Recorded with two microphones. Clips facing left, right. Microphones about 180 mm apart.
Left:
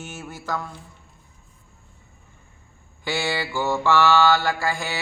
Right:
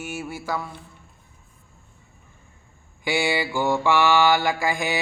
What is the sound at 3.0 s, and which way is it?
Mantra, 15° right (ahead or behind).